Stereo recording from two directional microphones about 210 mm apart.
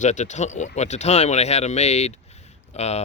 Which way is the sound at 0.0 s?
35° left (ahead or behind).